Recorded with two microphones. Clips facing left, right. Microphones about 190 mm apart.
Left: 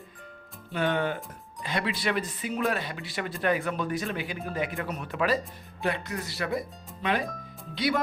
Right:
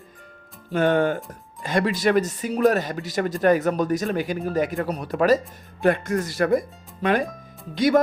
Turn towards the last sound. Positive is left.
turn(degrees=-45)  # may be behind; listen again after turning